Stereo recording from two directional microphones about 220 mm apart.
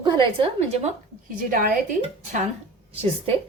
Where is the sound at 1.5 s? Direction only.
40° right (ahead or behind).